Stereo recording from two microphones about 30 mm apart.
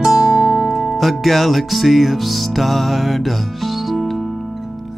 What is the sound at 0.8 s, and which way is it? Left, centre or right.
Music, centre.